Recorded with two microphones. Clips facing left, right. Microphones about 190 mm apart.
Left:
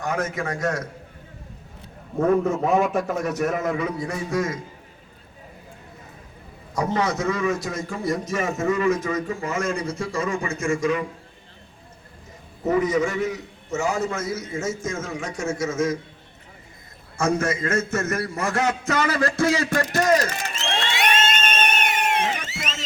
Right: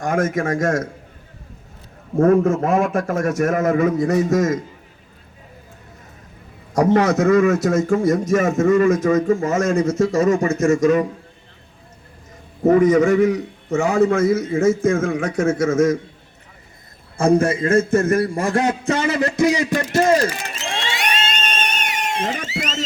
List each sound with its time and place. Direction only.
0.0 s a man's voice: 50° right (ahead or behind)
2.3 s a man's voice: centre (ahead or behind)
3.2 s a man's voice: 45° right (ahead or behind)
6.7 s a man's voice: 50° right (ahead or behind)
12.6 s a man's voice: 50° right (ahead or behind)
17.2 s a man's voice: 30° right (ahead or behind)
21.0 s a sound: 50° left (ahead or behind)
22.2 s a man's voice: 50° right (ahead or behind)
22.5 s a sound: 50° right (ahead or behind)